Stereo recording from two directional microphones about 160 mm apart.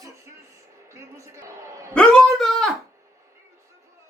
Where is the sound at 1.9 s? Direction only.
5° left (ahead or behind).